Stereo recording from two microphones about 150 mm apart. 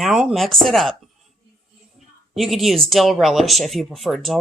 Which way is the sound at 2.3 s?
Centre (ahead or behind).